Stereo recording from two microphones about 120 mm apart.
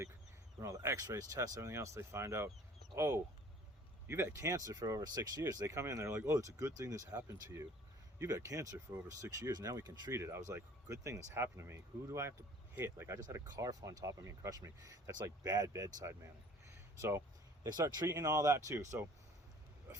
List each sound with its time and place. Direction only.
0.6 s speech: 25° right (ahead or behind)